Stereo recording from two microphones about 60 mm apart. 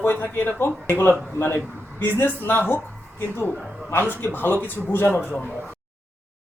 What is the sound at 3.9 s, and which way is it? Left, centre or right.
Speech, left.